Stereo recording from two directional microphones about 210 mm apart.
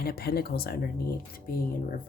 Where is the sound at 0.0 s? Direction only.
50° left (ahead or behind).